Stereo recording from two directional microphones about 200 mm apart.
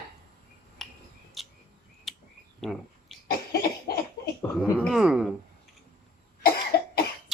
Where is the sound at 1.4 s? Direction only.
Centre (ahead or behind).